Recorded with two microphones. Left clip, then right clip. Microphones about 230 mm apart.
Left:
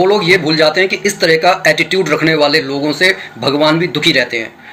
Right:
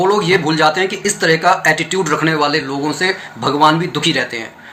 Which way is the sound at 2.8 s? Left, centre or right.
Centre.